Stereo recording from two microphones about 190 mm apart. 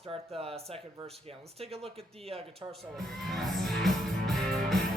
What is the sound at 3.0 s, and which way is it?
Music, centre (ahead or behind).